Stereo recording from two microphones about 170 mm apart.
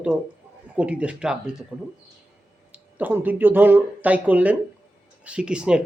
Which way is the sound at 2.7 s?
10° right (ahead or behind).